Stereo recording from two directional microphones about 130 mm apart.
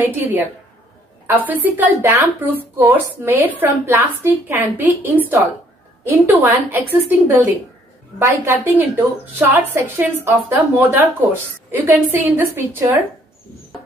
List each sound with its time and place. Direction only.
0.0 s a woman's voice: 15° right (ahead or behind)